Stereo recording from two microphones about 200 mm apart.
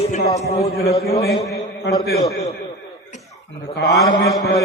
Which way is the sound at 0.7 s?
50° left (ahead or behind).